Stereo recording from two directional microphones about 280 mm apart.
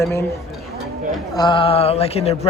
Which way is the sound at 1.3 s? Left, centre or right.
Centre.